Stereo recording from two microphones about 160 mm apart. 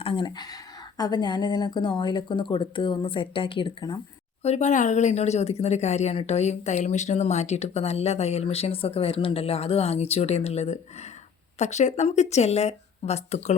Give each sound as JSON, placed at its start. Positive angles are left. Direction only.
{"t": 0.0, "sound": "speech", "side_deg": 30}
{"t": 4.4, "sound": "speech", "side_deg": 45}